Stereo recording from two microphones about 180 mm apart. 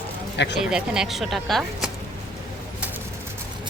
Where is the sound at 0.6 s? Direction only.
5° right (ahead or behind).